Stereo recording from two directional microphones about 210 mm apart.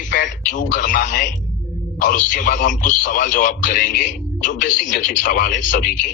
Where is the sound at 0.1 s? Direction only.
40° left (ahead or behind).